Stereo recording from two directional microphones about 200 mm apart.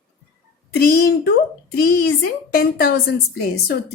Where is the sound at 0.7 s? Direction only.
50° left (ahead or behind).